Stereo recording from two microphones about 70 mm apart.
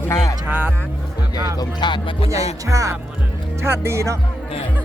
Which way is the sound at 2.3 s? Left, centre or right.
Right.